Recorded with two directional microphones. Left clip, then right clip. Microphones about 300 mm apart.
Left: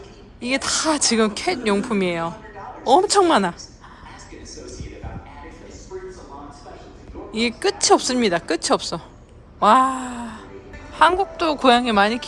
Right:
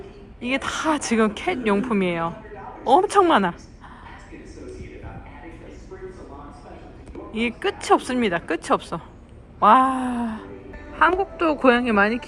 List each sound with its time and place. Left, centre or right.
0.4 s speech: centre
7.3 s speech: centre